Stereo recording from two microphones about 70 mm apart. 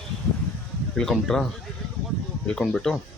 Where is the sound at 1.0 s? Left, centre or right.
Centre.